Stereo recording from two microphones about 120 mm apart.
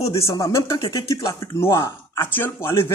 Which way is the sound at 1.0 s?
30° left (ahead or behind).